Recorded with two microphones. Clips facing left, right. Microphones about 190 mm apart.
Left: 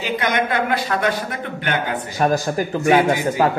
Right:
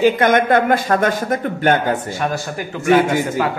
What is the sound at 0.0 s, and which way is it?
A man's voice, 50° right (ahead or behind).